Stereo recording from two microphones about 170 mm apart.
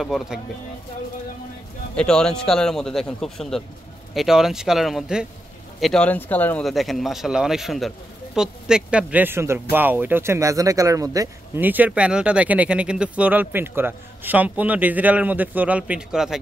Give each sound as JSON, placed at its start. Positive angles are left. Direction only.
{"t": 0.0, "sound": "speech", "side_deg": 0}
{"t": 2.0, "sound": "speech", "side_deg": 5}